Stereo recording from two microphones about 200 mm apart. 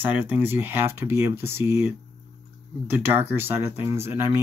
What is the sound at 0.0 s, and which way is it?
Speech, 10° right (ahead or behind).